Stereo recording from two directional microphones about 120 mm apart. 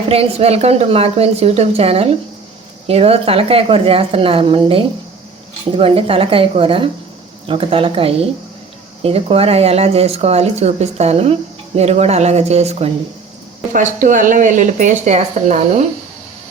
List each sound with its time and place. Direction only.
0.1 s a woman's voice: 55° right (ahead or behind)
13.7 s a woman's voice: 90° right